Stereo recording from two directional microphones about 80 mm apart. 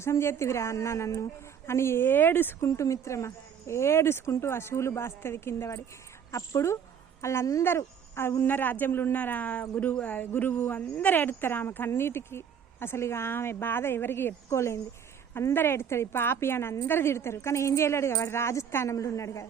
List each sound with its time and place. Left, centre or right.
0.0 s a woman's voice: left
2.6 s a woman's voice: left